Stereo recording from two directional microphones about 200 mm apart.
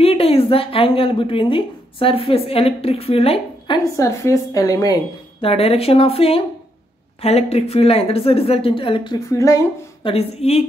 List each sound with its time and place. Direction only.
0.0 s a woman's voice: 30° left (ahead or behind)
5.4 s a woman's voice: 30° left (ahead or behind)
10.0 s a woman's voice: 30° left (ahead or behind)